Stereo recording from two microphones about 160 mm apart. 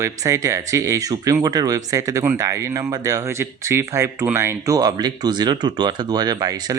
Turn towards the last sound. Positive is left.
turn(degrees=-25)  # may be behind; listen again after turning